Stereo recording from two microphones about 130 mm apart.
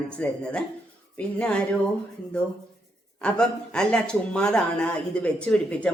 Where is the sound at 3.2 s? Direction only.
10° left (ahead or behind).